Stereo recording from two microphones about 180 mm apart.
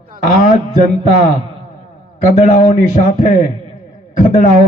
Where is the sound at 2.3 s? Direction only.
40° left (ahead or behind).